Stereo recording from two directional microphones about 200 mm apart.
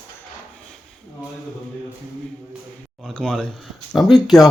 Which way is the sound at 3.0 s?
Centre (ahead or behind).